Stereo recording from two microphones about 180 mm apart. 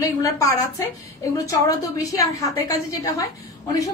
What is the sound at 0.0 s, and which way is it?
A woman's voice, 20° left (ahead or behind).